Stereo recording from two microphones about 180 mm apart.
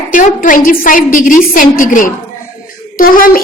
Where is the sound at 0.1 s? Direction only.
45° left (ahead or behind).